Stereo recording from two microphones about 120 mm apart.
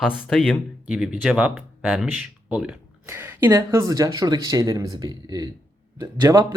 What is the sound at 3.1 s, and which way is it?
Speech, 20° right (ahead or behind).